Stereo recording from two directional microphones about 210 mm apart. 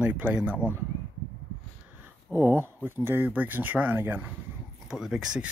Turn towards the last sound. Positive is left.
turn(degrees=-5)  # may be behind; listen again after turning